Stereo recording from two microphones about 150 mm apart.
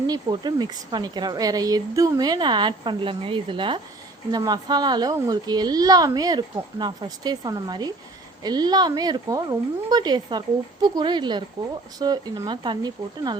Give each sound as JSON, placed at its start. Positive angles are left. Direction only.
{"t": 0.1, "sound": "speech", "side_deg": -30}